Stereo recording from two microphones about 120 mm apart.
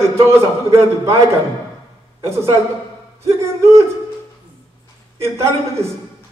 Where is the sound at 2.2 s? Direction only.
25° right (ahead or behind).